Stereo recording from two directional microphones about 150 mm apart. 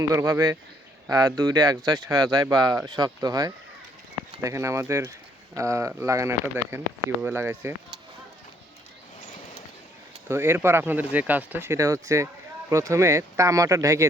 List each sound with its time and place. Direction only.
0.1 s speech: 20° right (ahead or behind)
10.2 s speech: 15° right (ahead or behind)